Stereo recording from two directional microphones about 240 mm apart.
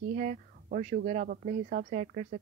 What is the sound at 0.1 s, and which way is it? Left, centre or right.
Speech, right.